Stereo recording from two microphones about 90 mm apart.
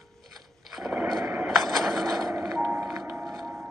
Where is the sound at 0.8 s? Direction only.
Centre (ahead or behind).